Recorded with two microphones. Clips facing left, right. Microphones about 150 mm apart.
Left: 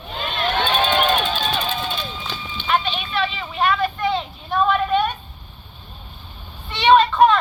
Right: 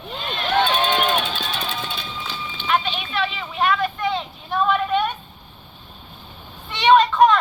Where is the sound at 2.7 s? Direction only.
5° right (ahead or behind).